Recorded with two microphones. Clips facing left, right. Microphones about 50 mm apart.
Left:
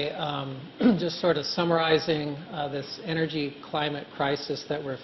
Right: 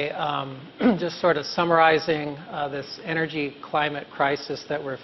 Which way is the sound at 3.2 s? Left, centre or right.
Right.